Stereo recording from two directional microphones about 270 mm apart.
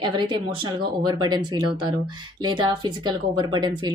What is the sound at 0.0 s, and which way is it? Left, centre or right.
A woman's voice, centre.